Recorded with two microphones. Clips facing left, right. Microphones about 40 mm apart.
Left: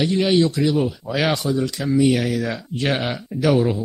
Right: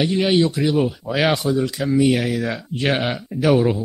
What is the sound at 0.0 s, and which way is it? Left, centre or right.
A man's voice, centre.